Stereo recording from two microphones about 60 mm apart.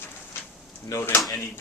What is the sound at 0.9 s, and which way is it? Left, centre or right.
Speech, left.